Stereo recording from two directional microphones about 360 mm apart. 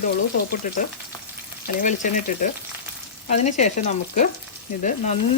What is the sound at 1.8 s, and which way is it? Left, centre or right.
Speech, left.